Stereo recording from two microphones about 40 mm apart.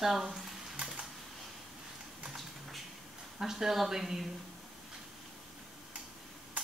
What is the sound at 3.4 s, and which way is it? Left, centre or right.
Speech, centre.